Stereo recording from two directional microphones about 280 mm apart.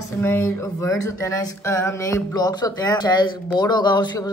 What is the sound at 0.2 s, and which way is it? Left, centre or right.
A child's voice, centre.